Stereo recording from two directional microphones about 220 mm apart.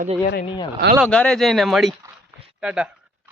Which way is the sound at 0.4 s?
20° left (ahead or behind).